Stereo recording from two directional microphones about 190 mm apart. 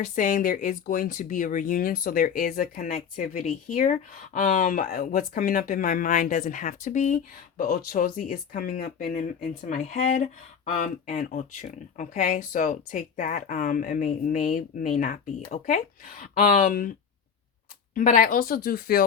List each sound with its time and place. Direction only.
0.0 s speech: 45° left (ahead or behind)
17.9 s speech: 45° left (ahead or behind)